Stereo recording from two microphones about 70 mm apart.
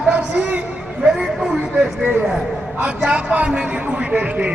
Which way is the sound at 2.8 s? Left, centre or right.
Centre.